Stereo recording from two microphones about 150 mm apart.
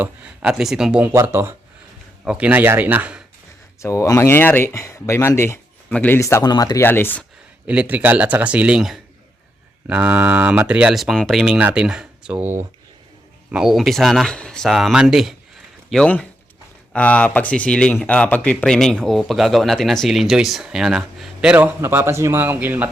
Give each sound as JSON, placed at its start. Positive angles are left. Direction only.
{"t": 0.0, "sound": "speech", "side_deg": -5}
{"t": 3.8, "sound": "speech", "side_deg": 20}
{"t": 6.8, "sound": "speech", "side_deg": 15}
{"t": 7.7, "sound": "speech", "side_deg": -10}